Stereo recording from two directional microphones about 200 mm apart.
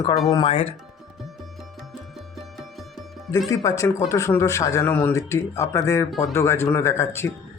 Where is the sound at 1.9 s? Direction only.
Centre (ahead or behind).